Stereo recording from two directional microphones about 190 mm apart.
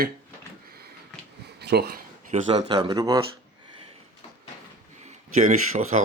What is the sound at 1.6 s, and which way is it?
Speech, 60° right (ahead or behind).